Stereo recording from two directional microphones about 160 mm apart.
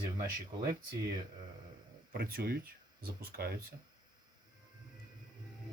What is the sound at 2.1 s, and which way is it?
Speech, 70° right (ahead or behind).